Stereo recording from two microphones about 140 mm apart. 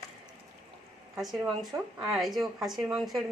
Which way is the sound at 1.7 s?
30° right (ahead or behind).